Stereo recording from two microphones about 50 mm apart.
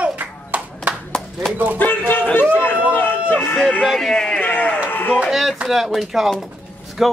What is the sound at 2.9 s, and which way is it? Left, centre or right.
Run, left.